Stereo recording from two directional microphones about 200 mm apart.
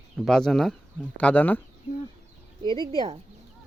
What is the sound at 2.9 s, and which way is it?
Speech, 25° right (ahead or behind).